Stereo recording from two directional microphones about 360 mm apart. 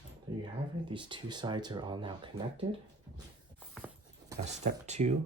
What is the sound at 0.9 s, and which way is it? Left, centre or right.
Speech, centre.